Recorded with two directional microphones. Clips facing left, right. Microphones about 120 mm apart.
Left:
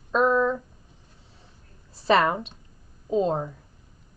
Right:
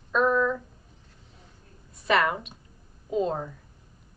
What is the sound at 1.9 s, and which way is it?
A woman's voice, 30° left (ahead or behind).